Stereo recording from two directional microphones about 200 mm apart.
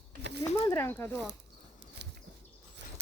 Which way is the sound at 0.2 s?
60° right (ahead or behind).